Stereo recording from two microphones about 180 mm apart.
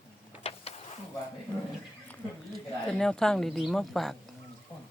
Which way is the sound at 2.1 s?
5° left (ahead or behind).